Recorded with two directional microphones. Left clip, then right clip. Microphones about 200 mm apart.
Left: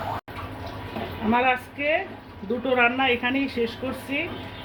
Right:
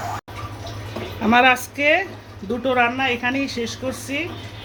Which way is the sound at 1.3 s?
50° right (ahead or behind).